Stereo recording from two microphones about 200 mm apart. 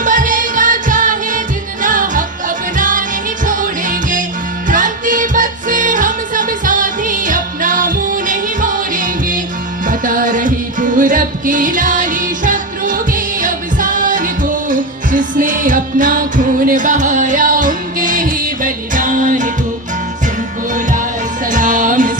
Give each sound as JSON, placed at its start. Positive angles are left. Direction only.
{"t": 0.0, "sound": "music", "side_deg": -40}
{"t": 21.4, "sound": "music", "side_deg": -40}